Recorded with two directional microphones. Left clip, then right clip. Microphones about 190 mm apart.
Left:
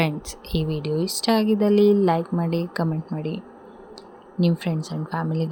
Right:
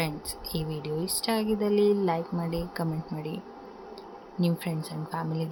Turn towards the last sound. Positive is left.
turn(degrees=30)  # may be behind; listen again after turning